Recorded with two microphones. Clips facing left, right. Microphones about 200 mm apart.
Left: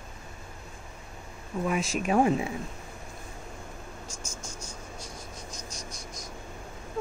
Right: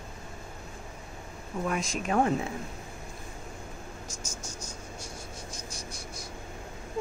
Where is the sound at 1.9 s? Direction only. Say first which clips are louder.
Left 3 dB; 10° left (ahead or behind).